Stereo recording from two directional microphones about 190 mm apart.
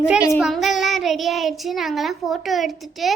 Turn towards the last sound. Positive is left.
turn(degrees=0)  # may be behind; listen again after turning